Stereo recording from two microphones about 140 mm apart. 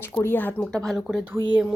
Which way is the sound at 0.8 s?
Centre (ahead or behind).